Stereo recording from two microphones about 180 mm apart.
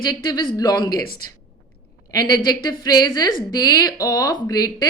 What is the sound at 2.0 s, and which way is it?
A woman's voice, 20° left (ahead or behind).